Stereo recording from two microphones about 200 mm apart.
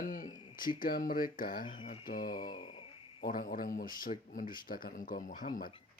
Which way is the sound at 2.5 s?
25° left (ahead or behind).